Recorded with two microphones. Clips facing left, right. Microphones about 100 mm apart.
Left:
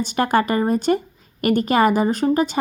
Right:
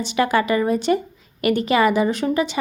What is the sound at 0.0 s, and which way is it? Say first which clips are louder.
A woman's voice: left 1 dB; 45° left (ahead or behind).